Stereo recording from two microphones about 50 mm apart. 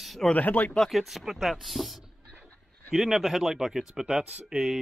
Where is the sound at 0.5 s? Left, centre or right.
Left.